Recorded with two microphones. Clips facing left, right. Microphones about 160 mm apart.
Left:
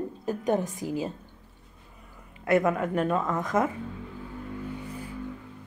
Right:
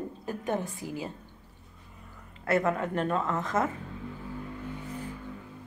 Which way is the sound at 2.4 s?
15° left (ahead or behind).